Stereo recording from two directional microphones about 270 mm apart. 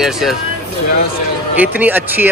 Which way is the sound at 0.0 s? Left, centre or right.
Centre.